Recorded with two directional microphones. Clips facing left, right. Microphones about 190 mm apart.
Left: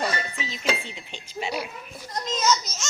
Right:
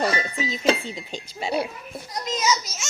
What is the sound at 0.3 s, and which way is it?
Speech, 40° right (ahead or behind).